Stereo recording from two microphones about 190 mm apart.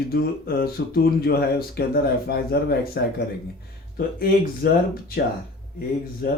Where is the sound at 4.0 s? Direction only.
50° left (ahead or behind).